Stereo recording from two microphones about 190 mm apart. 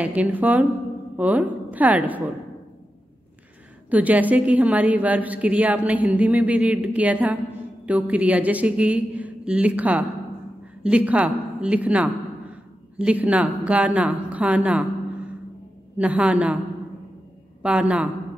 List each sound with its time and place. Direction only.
0.0 s a woman's voice: 5° right (ahead or behind)
3.9 s a woman's voice: 10° right (ahead or behind)
16.0 s a woman's voice: 5° right (ahead or behind)
17.6 s a woman's voice: 5° right (ahead or behind)